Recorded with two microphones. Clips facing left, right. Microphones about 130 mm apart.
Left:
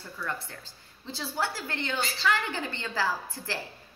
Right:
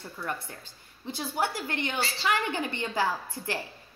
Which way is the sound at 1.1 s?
15° right (ahead or behind).